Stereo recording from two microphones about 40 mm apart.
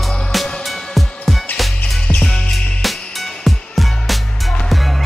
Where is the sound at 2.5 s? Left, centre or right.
Centre.